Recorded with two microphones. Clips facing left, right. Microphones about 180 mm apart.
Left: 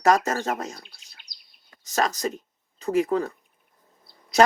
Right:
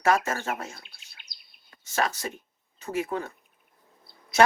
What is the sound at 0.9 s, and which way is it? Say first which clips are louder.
Bird: left 1 dB; 60° right (ahead or behind).